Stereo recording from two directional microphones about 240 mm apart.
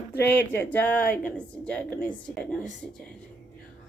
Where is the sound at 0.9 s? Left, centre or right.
Left.